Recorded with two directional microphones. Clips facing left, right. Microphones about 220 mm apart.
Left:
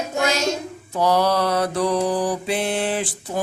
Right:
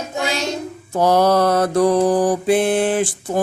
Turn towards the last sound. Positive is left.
turn(degrees=-50)  # may be behind; listen again after turning